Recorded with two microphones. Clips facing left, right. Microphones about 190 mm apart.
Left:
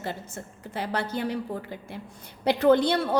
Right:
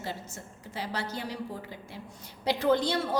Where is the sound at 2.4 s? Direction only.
60° left (ahead or behind).